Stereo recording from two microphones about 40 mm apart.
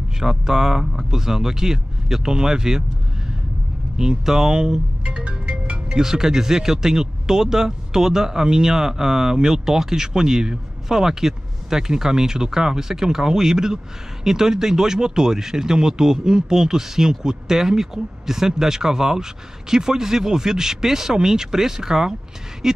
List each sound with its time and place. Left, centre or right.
0.2 s speech: centre
3.9 s speech: centre
5.9 s speech: centre